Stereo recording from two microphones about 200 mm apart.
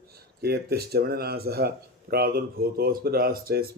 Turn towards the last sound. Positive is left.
turn(degrees=-50)  # may be behind; listen again after turning